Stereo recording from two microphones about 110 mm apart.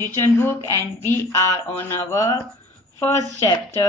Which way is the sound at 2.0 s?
30° left (ahead or behind).